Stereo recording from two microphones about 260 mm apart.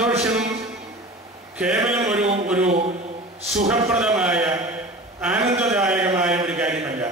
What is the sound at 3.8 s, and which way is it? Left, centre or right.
A man's voice, centre.